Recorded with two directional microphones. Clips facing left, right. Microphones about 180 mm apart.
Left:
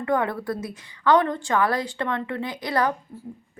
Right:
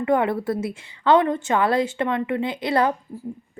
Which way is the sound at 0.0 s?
20° right (ahead or behind).